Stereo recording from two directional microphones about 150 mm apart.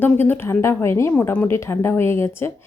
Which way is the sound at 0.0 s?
15° left (ahead or behind).